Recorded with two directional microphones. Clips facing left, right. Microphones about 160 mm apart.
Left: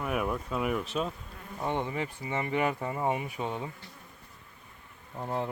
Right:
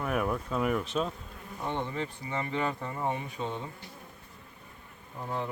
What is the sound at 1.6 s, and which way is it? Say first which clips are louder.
Speech: left 2 dB; 15° left (ahead or behind).